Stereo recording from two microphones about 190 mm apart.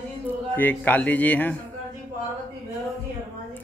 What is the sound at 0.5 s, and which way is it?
Speech, 10° left (ahead or behind).